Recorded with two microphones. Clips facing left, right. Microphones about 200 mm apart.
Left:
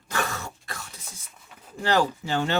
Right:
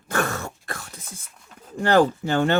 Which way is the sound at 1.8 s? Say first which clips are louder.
Right 6 dB; 55° right (ahead or behind).